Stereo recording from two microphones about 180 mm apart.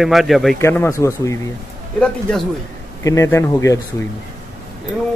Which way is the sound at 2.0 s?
5° left (ahead or behind).